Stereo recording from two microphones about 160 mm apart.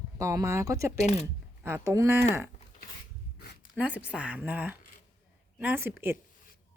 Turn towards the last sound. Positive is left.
turn(degrees=-15)  # may be behind; listen again after turning